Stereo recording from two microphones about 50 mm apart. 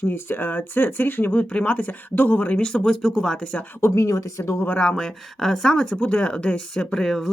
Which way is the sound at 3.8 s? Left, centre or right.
Left.